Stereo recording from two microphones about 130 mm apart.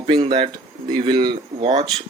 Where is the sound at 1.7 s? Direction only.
55° right (ahead or behind).